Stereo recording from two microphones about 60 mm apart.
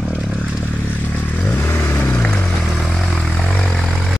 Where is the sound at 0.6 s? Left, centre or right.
Left.